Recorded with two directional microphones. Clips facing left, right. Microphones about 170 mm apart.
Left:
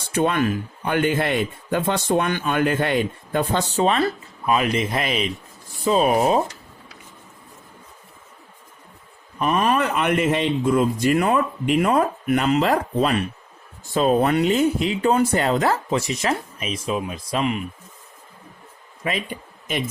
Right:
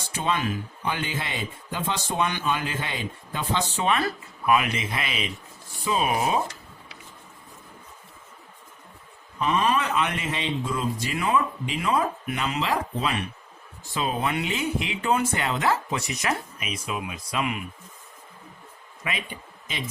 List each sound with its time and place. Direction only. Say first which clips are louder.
0.1 s speech: left 7 dB; 55° left (ahead or behind); by 6.4 s 40° left (ahead or behind)
9.4 s speech: left 4 dB; 50° left (ahead or behind); by 17.6 s 35° left (ahead or behind)
19.0 s speech: left 7 dB; 35° left (ahead or behind)